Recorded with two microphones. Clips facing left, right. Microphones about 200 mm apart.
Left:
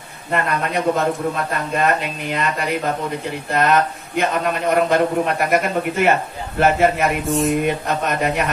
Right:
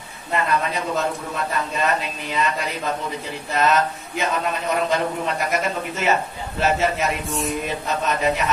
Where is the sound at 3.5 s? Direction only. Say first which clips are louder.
Left 2 dB; 55° left (ahead or behind).